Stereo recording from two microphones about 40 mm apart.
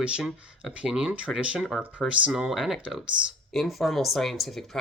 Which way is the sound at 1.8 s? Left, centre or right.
Right.